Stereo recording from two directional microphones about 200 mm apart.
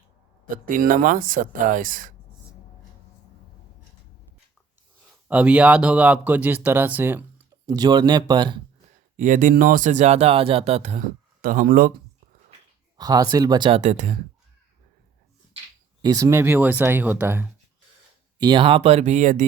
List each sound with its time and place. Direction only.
0.5 s speech: 45° right (ahead or behind)
5.3 s speech: 5° right (ahead or behind)
7.7 s speech: 20° right (ahead or behind)
9.1 s speech: 40° right (ahead or behind)
13.0 s speech: 20° right (ahead or behind); by 14.2 s 35° right (ahead or behind)
16.0 s speech: 20° right (ahead or behind)
18.3 s speech: 20° right (ahead or behind); by 19.5 s 40° right (ahead or behind)